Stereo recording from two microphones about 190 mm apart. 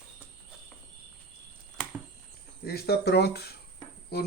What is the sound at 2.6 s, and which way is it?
Speech, 55° left (ahead or behind).